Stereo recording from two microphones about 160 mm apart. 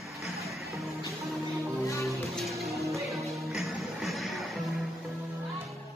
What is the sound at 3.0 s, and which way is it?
Music, centre (ahead or behind).